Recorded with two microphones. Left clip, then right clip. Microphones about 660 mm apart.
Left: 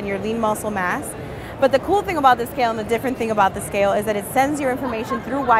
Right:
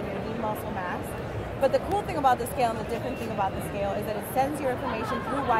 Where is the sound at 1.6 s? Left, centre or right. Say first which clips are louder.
Left 8 dB; left.